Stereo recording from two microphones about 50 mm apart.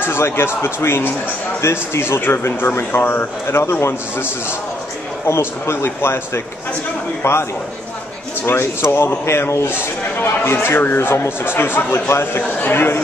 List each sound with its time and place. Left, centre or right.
0.0 s a man's voice: left
8.5 s a man's voice: left